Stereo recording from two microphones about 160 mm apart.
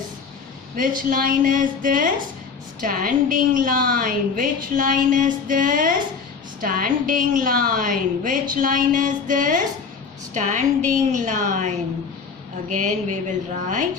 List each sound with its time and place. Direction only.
0.8 s a woman's voice: 60° right (ahead or behind)